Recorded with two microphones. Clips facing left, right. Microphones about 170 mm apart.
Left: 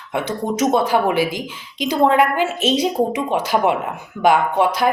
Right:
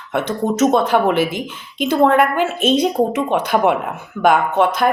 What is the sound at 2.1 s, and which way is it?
Speech, 55° right (ahead or behind).